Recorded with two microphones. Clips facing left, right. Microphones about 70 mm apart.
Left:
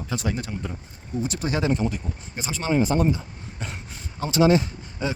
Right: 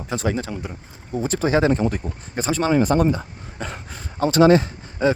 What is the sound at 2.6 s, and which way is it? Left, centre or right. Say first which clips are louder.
Speech: right 3 dB; right.